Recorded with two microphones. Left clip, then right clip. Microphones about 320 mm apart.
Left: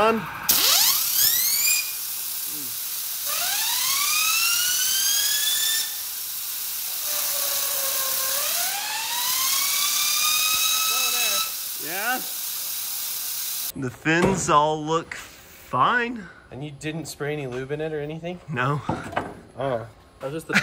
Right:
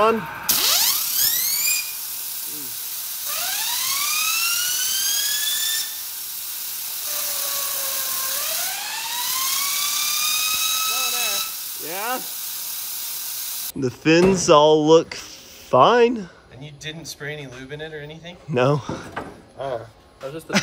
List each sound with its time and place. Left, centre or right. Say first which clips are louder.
0.0 s a sound: right 2 dB; centre
3.3 s police car: even; centre
7.1 s dental drill: even; centre
11.9 s sizzle: even; centre
13.7 s speech: right 5 dB; centre
16.8 s speech: left 1 dB; centre
18.5 s speech: right 6 dB; centre